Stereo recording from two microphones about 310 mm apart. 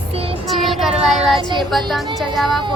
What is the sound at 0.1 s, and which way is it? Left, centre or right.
Child singing, centre.